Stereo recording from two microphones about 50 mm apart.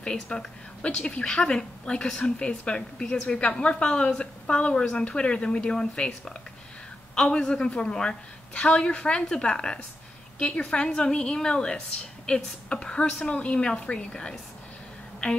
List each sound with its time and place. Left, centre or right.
0.0 s a woman's voice: centre